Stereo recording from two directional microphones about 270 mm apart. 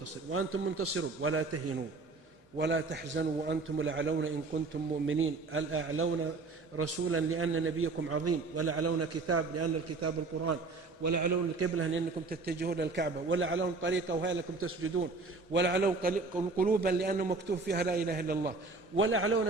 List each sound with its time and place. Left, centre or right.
0.3 s a man's voice: right
2.6 s a man's voice: right
11.0 s a man's voice: right
12.3 s a man's voice: right
15.5 s a man's voice: right
18.9 s a man's voice: right